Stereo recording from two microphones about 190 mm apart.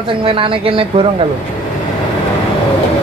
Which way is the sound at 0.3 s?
30° right (ahead or behind).